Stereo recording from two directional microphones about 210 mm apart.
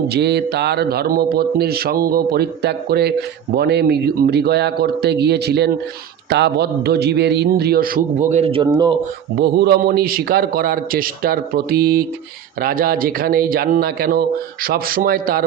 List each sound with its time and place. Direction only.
0.1 s speech: 50° right (ahead or behind)
8.3 s speech: 30° right (ahead or behind)
9.4 s speech: 50° right (ahead or behind)